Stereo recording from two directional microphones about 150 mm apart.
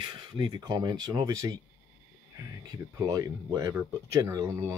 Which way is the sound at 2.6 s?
20° right (ahead or behind).